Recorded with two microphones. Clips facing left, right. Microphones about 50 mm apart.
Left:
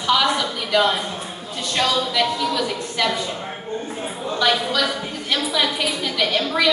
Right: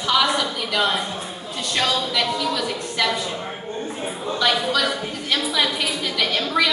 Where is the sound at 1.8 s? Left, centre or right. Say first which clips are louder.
Left 2 dB; centre.